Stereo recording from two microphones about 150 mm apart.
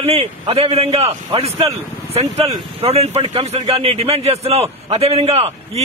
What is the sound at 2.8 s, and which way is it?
A man's voice, 45° right (ahead or behind).